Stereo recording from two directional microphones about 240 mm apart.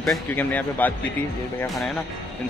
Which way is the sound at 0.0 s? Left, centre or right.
Centre.